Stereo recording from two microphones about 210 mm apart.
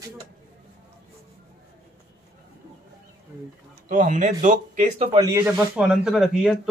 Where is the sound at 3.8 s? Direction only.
35° right (ahead or behind).